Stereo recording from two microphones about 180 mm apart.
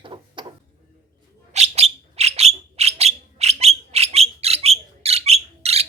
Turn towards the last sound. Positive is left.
turn(degrees=-35)  # may be behind; listen again after turning